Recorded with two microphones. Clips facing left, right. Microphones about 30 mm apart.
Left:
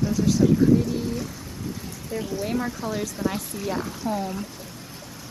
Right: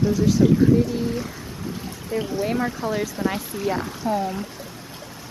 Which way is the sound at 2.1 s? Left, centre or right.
Right.